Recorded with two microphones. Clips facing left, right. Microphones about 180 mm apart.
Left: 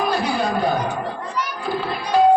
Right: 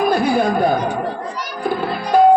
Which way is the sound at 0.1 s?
50° right (ahead or behind).